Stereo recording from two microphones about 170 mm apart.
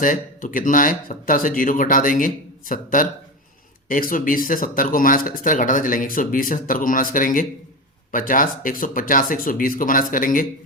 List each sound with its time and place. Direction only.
0.0 s speech: 50° left (ahead or behind)